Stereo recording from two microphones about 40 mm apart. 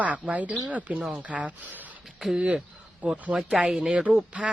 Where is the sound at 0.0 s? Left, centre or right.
Right.